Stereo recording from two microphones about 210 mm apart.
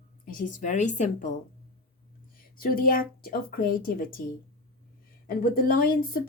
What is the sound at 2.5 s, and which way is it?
A woman's voice, 45° left (ahead or behind).